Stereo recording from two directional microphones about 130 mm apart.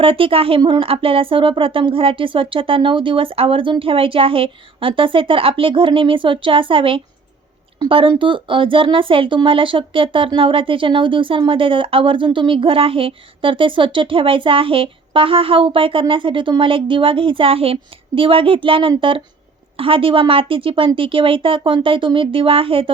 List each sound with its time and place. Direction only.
0.0 s speech: 45° right (ahead or behind)